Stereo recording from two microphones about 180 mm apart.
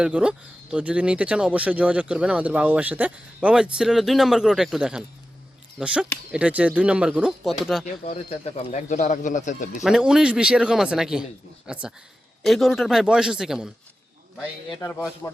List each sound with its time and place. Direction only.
0.0 s speech: 5° right (ahead or behind)
7.9 s speech: 35° left (ahead or behind)
9.8 s speech: 5° right (ahead or behind)
14.8 s a man's voice: 15° left (ahead or behind)